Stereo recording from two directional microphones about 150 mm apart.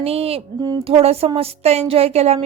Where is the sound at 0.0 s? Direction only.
40° right (ahead or behind).